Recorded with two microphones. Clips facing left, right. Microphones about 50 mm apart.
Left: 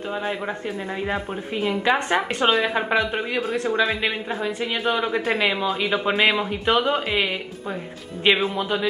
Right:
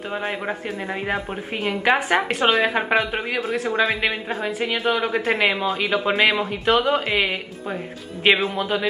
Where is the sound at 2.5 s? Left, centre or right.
Centre.